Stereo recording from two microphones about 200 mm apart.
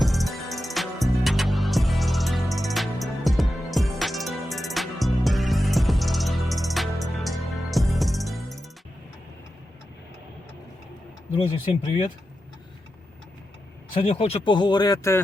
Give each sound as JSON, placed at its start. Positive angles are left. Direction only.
{"t": 0.0, "sound": "music", "side_deg": 0}
{"t": 13.9, "sound": "speech", "side_deg": 25}